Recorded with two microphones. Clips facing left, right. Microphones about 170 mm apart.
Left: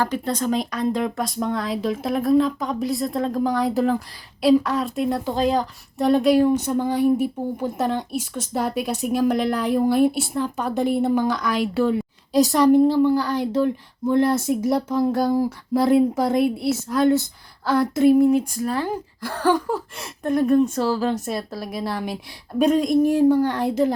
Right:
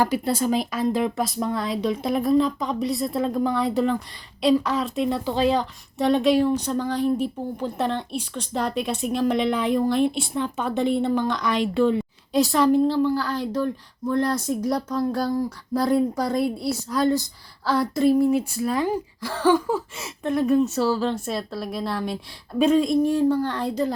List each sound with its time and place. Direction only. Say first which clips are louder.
0.0 s speech: right 1 dB; 10° right (ahead or behind)
12.5 s speech: left 4 dB; 15° left (ahead or behind)
14.7 s a sound: left 4 dB; 25° left (ahead or behind)
16.7 s speech: left 3 dB; centre (ahead or behind)
18.5 s speech: right 1 dB; 10° right (ahead or behind)
22.9 s speech: left 3 dB; 15° left (ahead or behind)